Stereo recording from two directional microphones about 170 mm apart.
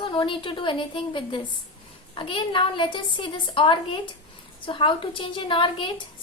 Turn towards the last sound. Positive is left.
turn(degrees=30)  # may be behind; listen again after turning